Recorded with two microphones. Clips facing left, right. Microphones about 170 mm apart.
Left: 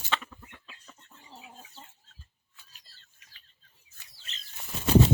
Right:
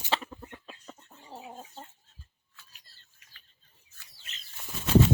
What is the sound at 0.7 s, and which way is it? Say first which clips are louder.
Chicken: right 6 dB; 45° right (ahead or behind).